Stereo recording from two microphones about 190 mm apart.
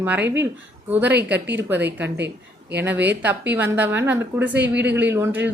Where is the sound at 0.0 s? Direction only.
10° right (ahead or behind).